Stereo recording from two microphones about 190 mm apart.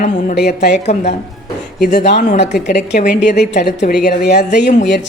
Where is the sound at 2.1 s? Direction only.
45° left (ahead or behind).